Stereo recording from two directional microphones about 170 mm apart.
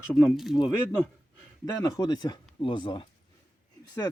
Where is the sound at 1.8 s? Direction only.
20° left (ahead or behind).